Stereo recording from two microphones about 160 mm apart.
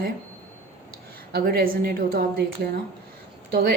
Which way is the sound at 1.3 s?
70° right (ahead or behind).